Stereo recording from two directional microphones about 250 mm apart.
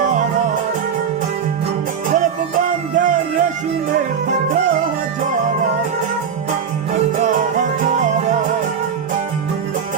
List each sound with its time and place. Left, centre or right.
0.0 s music: right
2.0 s music: right
7.2 s music: right